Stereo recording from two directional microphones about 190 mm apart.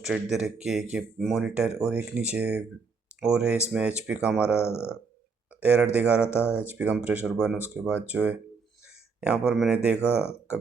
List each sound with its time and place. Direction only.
0.0 s speech: 5° right (ahead or behind)
4.7 s speech: 15° left (ahead or behind)
5.5 s speech: 5° right (ahead or behind)